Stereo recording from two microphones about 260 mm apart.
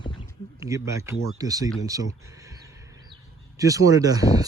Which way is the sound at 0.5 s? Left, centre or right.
Centre.